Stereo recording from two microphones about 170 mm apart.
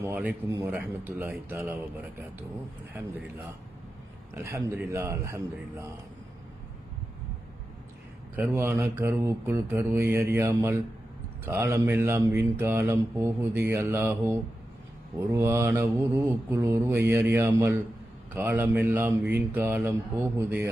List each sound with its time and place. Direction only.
0.0 s speech: 10° right (ahead or behind)
4.4 s speech: 15° right (ahead or behind)
8.4 s speech: 10° right (ahead or behind)